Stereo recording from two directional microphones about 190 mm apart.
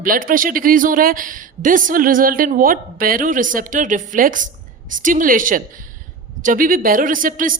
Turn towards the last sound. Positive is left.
turn(degrees=-45)  # may be behind; listen again after turning